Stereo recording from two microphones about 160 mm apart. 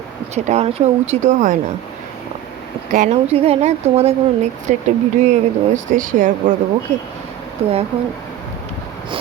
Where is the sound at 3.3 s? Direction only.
40° right (ahead or behind); by 6.3 s 55° right (ahead or behind).